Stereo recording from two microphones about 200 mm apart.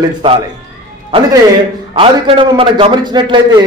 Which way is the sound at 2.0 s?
25° right (ahead or behind).